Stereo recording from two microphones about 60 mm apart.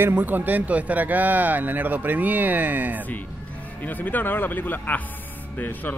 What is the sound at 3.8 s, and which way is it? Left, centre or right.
Speech, left.